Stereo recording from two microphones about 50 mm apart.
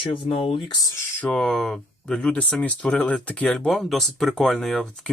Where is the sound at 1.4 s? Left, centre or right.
Centre.